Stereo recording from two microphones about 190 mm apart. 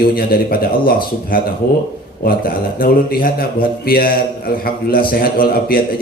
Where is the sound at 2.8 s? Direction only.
50° left (ahead or behind).